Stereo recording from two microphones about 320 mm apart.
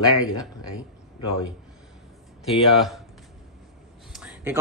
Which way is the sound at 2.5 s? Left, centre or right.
Centre.